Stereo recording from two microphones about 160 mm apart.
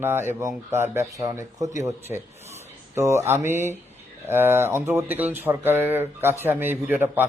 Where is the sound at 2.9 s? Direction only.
15° right (ahead or behind).